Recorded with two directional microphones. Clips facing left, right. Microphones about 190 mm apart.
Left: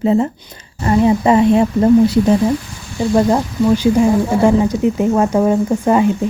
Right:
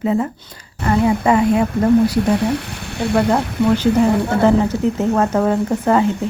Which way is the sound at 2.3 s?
70° right (ahead or behind).